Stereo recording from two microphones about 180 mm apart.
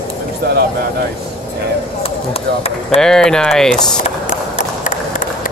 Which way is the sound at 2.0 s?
35° left (ahead or behind).